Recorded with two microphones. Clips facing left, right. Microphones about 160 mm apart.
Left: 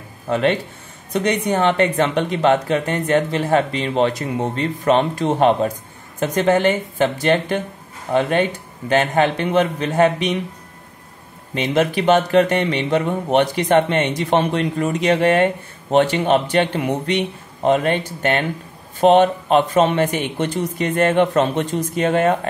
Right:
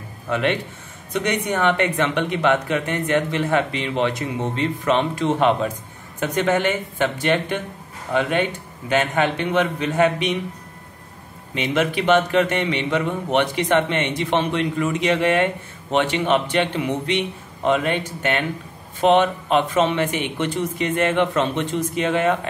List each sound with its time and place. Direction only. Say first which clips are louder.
0.3 s a man's voice: left 3 dB; 35° left (ahead or behind)
11.5 s a man's voice: left 3 dB; 40° left (ahead or behind)